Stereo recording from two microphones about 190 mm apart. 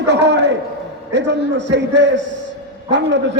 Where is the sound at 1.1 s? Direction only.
70° right (ahead or behind).